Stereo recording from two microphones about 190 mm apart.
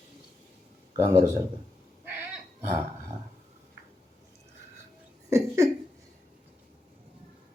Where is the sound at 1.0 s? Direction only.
35° right (ahead or behind).